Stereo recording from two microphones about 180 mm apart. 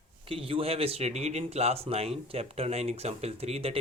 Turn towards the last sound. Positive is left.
turn(degrees=-35)  # may be behind; listen again after turning